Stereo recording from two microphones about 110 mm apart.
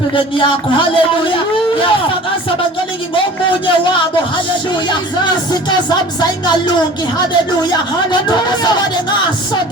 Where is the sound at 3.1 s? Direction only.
50° left (ahead or behind).